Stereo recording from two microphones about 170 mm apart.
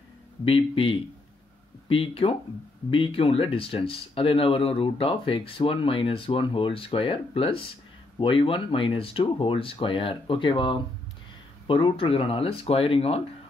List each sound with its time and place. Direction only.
0.5 s speech: 30° left (ahead or behind)